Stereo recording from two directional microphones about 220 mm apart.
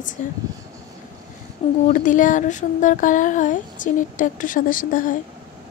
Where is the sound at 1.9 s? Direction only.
35° left (ahead or behind).